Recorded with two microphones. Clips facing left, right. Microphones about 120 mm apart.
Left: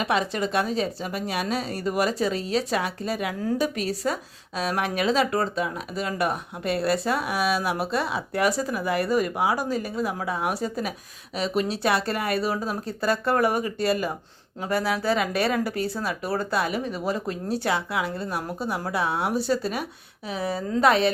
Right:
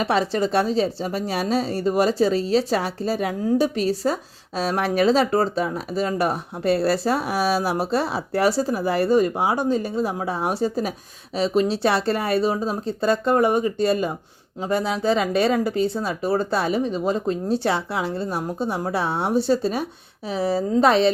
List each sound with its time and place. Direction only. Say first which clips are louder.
0.0 s a woman's voice: right 4 dB; 35° right (ahead or behind)